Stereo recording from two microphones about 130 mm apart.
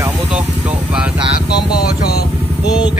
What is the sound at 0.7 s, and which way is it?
Speech, 10° right (ahead or behind).